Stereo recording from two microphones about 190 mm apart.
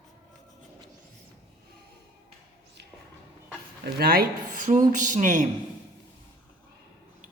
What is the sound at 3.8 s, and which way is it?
Speech, 55° right (ahead or behind).